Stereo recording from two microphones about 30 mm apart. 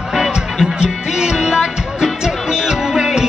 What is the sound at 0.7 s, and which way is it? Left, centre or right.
Music, right.